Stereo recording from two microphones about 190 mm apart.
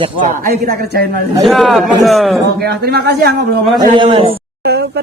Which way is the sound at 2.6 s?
55° right (ahead or behind).